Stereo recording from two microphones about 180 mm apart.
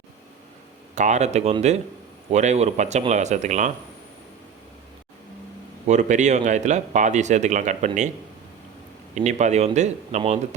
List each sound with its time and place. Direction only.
0.9 s speech: 40° right (ahead or behind)
5.9 s speech: 40° right (ahead or behind)
9.1 s speech: 40° right (ahead or behind)